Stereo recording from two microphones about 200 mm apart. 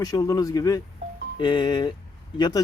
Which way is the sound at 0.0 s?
15° left (ahead or behind).